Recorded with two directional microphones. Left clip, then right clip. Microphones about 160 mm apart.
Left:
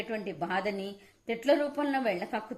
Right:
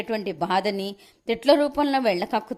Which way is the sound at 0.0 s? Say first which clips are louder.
Right 8 dB; 35° right (ahead or behind).